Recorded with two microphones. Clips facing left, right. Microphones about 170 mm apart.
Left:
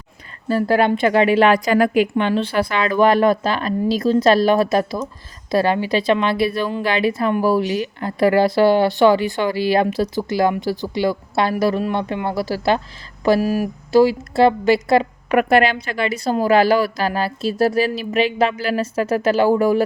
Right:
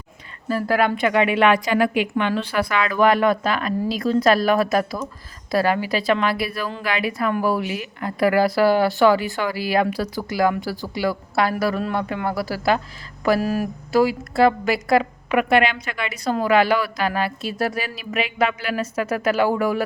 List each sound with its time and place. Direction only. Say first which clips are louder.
0.4 s a woman's voice: left 4 dB; 30° left (ahead or behind)
13.4 s speech: left 3 dB; 15° left (ahead or behind)
13.9 s speech: left 4 dB; 30° left (ahead or behind)
15.3 s a woman's voice: left 3 dB; 40° left (ahead or behind)